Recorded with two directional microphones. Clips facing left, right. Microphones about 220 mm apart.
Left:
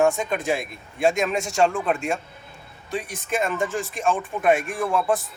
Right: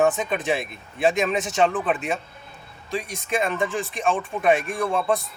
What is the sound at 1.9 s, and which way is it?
Speech, 20° right (ahead or behind).